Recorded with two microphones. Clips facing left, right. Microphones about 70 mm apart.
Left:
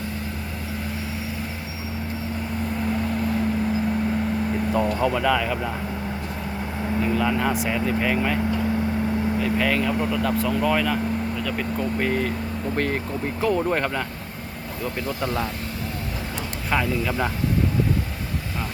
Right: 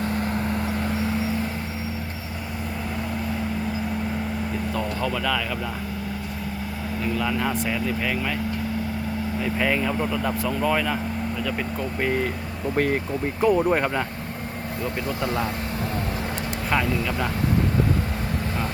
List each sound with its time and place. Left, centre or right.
4.7 s speech: centre
7.0 s speech: centre
9.4 s speech: centre
15.2 s speech: centre
16.6 s speech: centre